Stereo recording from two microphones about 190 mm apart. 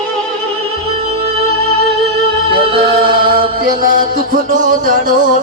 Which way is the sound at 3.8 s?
45° right (ahead or behind).